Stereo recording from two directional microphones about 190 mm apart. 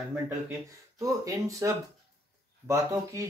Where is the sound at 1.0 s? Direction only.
15° right (ahead or behind).